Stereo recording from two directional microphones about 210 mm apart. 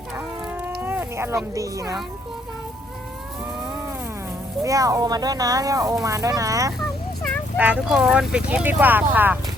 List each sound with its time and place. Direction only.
0.2 s livestock: 10° right (ahead or behind)
1.5 s speech: 15° right (ahead or behind)
4.6 s speech: 15° right (ahead or behind)
7.2 s speech: centre (ahead or behind)